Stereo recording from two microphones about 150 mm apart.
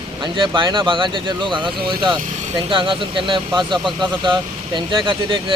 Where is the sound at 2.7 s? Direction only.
35° right (ahead or behind).